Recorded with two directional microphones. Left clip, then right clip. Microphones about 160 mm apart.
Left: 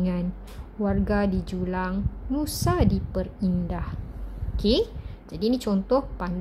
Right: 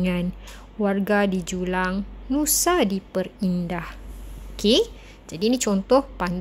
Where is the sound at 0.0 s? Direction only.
15° right (ahead or behind).